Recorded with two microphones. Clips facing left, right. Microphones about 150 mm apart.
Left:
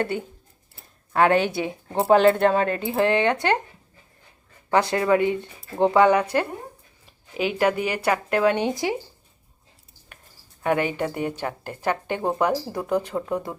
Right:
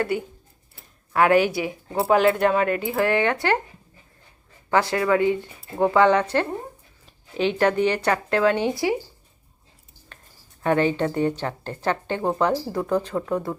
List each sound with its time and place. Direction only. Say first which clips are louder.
0.0 s speech: right 1 dB; 25° left (ahead or behind)
4.7 s speech: left 1 dB; 20° left (ahead or behind)
10.6 s speech: right 2 dB; 15° left (ahead or behind)